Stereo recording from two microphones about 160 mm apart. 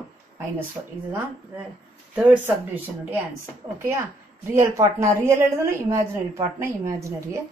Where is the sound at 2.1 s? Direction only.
10° right (ahead or behind).